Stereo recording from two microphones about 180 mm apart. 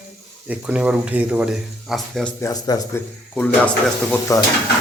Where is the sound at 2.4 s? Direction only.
20° left (ahead or behind).